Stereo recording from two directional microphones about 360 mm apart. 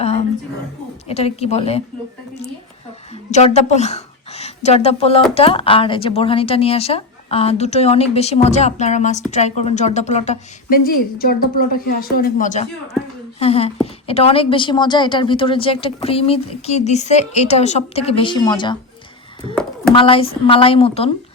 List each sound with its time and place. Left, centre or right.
0.0 s a sound: centre
1.0 s speech: centre
3.3 s a woman's voice: centre
19.9 s speech: centre